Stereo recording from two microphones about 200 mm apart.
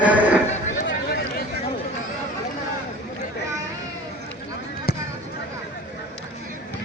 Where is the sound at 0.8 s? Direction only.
55° left (ahead or behind).